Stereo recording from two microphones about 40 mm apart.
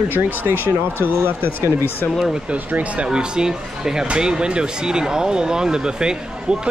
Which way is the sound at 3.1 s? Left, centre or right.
Centre.